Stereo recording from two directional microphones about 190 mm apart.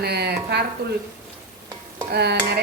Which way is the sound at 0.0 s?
60° right (ahead or behind).